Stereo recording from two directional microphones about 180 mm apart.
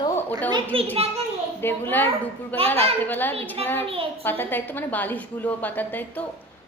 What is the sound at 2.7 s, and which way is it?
Speech, 35° right (ahead or behind).